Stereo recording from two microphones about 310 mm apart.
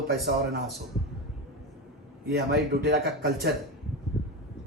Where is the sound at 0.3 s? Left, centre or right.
Right.